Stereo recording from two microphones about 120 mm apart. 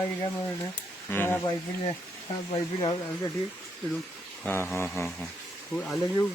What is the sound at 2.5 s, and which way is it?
Speech, 30° left (ahead or behind).